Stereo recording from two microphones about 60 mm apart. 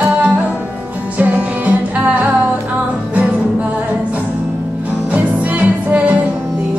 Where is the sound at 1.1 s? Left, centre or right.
Right.